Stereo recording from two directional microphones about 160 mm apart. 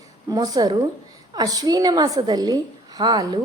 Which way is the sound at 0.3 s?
25° right (ahead or behind).